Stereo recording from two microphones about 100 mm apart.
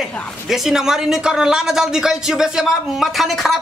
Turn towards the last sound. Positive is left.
turn(degrees=0)  # may be behind; listen again after turning